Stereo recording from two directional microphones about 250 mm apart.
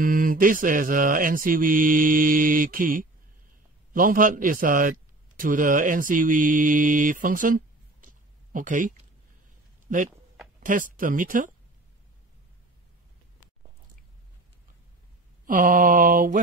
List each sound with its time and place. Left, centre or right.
0.0 s mantra: right
3.9 s a man's voice: right
10.6 s mantra: right
15.4 s mantra: right